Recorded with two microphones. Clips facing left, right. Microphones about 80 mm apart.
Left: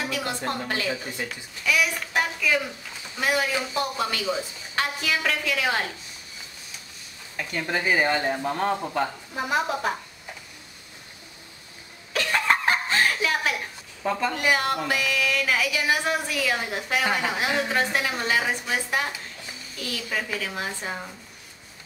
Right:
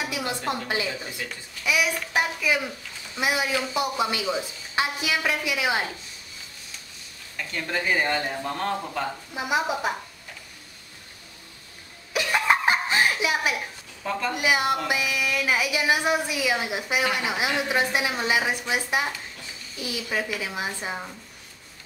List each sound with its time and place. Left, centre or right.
0.1 s a sound: centre
0.5 s a woman's voice: centre
0.8 s speech: centre
1.6 s a woman's voice: centre
7.3 s speech: centre
9.3 s a woman's voice: centre
12.1 s laughter: centre
14.3 s a woman's voice: centre